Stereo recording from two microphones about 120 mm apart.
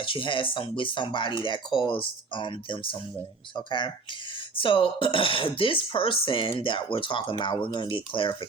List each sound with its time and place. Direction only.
0.0 s speech: 45° left (ahead or behind)